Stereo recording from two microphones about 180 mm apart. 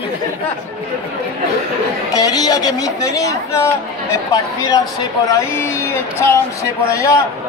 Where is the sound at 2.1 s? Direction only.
20° left (ahead or behind).